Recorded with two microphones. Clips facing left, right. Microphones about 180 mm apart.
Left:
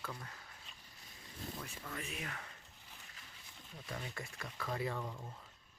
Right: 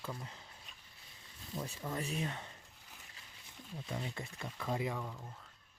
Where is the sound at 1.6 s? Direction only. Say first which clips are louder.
Right 12 dB; 30° right (ahead or behind).